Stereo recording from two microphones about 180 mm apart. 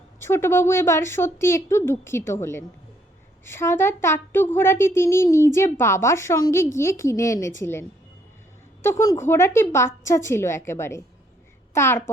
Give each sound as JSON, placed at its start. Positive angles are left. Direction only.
{"t": 0.2, "sound": "speech", "side_deg": 15}